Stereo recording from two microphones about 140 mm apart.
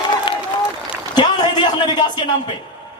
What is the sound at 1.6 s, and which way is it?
Speech, 30° left (ahead or behind).